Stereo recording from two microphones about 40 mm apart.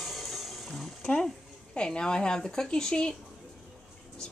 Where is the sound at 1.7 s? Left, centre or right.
Left.